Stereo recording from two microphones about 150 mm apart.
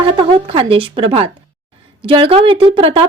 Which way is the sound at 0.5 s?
35° right (ahead or behind).